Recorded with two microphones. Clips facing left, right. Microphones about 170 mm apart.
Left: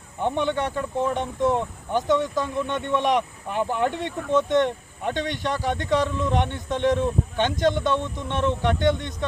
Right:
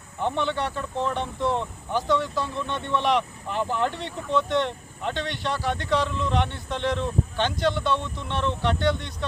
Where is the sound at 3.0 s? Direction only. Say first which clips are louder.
Left 1 dB; 45° left (ahead or behind).